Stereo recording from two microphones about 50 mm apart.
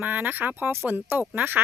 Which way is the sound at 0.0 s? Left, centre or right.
Right.